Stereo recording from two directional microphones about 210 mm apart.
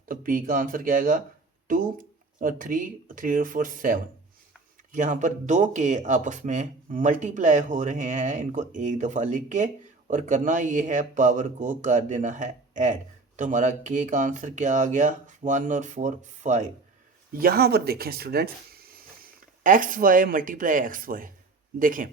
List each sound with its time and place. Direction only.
0.0 s speech: 40° right (ahead or behind)
17.3 s speech: 45° right (ahead or behind)